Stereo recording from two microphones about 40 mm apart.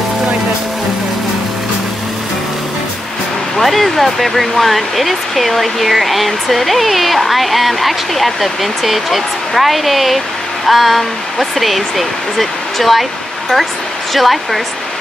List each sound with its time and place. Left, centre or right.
3.5 s speech: centre
14.1 s speech: centre